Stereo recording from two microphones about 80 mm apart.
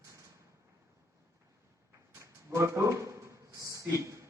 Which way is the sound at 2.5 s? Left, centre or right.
Right.